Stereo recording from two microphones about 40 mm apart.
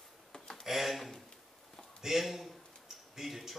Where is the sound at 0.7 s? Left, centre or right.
Centre.